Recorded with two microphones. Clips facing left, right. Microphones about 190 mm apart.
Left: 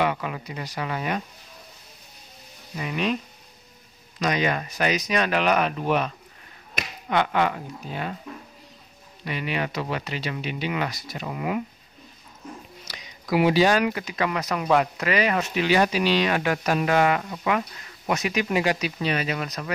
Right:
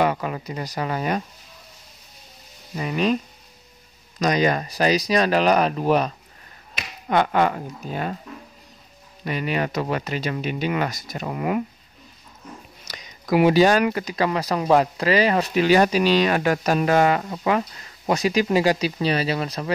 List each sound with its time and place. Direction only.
0.0 s speech: 40° right (ahead or behind)
2.8 s speech: 35° right (ahead or behind)
4.2 s speech: 40° right (ahead or behind)
9.2 s speech: 40° right (ahead or behind)
12.8 s speech: 45° right (ahead or behind); by 19.7 s 30° right (ahead or behind)